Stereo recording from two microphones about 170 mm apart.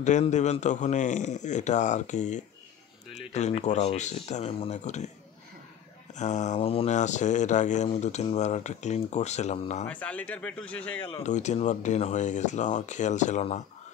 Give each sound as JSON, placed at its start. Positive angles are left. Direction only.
{"t": 0.2, "sound": "speech", "side_deg": 40}
{"t": 6.1, "sound": "speech", "side_deg": 45}
{"t": 9.8, "sound": "speech", "side_deg": 10}
{"t": 11.1, "sound": "speech", "side_deg": 40}